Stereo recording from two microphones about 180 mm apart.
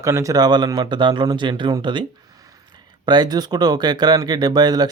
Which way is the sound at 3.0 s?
25° right (ahead or behind).